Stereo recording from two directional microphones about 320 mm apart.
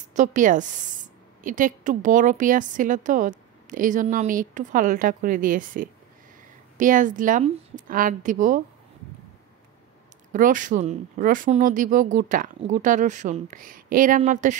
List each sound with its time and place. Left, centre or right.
0.1 s a woman's voice: right
10.3 s a woman's voice: right